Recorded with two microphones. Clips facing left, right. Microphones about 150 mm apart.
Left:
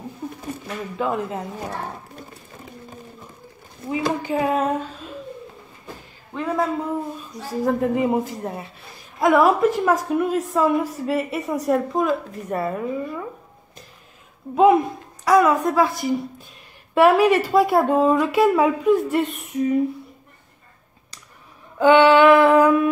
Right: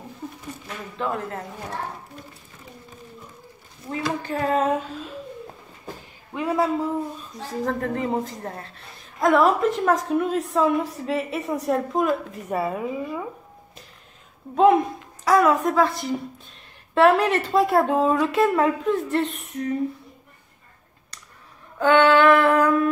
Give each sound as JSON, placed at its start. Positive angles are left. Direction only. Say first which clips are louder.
{"t": 0.9, "sound": "speech", "louder": "left 3 dB", "side_deg": 15}
{"t": 4.2, "sound": "speech", "louder": "right 2 dB", "side_deg": 10}
{"t": 6.3, "sound": "speech", "louder": "even", "side_deg": -5}
{"t": 7.6, "sound": "a woman's voice", "louder": "left 6 dB", "side_deg": 10}
{"t": 14.5, "sound": "a woman's voice", "louder": "left 2 dB", "side_deg": 5}
{"t": 21.7, "sound": "female singing", "louder": "left 3 dB", "side_deg": 15}